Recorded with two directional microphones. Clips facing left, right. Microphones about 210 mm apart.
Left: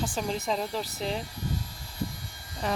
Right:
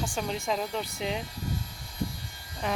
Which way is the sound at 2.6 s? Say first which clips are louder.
Left 1 dB; centre (ahead or behind).